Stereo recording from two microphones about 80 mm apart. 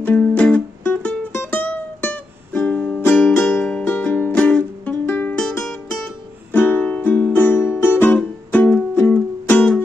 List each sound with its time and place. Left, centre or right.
0.0 s music: centre
3.6 s music: centre
6.5 s music: left